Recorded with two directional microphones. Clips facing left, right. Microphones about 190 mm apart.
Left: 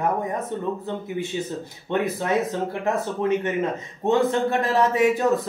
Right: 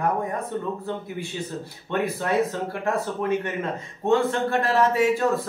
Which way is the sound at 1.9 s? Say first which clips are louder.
Left 2 dB; 20° left (ahead or behind).